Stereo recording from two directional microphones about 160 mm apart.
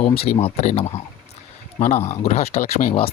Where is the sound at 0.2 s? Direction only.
40° left (ahead or behind).